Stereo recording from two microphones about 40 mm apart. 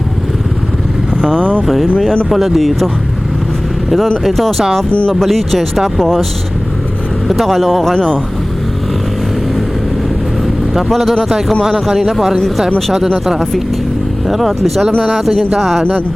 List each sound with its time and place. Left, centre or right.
1.3 s speech: right
1.6 s speech: centre
4.9 s speech: left
5.2 s speech: centre
7.3 s speech: centre
10.8 s speech: centre
11.6 s a man's voice: centre
14.3 s speech: centre